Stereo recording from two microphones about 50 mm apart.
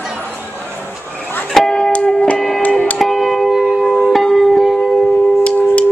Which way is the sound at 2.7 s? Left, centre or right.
Left.